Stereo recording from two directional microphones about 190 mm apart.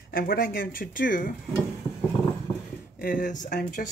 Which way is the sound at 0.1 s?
50° left (ahead or behind).